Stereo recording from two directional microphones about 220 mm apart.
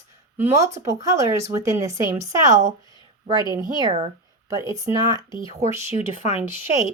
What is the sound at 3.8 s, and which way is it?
Speech, 25° right (ahead or behind).